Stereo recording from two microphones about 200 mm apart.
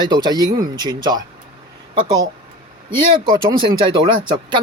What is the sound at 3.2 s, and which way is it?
Speech, 25° right (ahead or behind).